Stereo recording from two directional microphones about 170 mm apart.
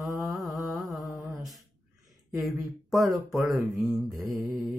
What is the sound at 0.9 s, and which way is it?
Mantra, 20° left (ahead or behind).